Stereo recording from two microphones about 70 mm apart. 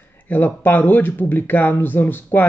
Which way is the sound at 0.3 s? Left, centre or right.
Left.